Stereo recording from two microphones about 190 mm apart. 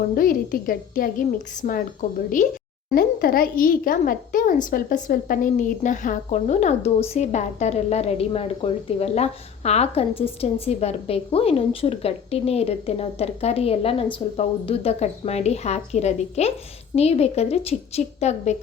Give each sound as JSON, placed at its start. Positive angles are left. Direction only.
{"t": 0.2, "sound": "speech", "side_deg": 50}